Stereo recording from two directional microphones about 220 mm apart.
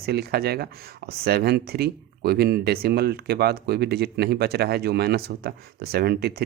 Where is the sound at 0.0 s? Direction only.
45° right (ahead or behind).